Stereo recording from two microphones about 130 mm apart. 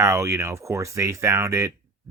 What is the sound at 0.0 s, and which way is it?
Speech, 25° right (ahead or behind).